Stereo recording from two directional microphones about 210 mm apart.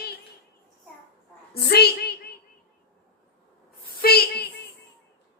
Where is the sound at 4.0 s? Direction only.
45° left (ahead or behind).